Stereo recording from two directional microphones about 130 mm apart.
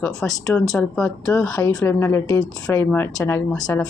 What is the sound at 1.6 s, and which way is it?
Speech, 30° left (ahead or behind).